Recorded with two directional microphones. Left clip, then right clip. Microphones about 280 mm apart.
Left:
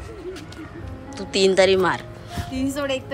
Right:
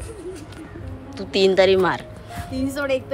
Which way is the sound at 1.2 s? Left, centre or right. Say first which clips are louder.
Right 1 dB; centre.